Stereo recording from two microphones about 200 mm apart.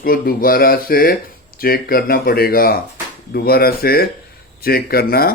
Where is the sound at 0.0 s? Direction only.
45° left (ahead or behind).